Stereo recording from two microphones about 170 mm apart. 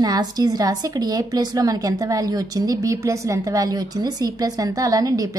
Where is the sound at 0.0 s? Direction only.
25° right (ahead or behind).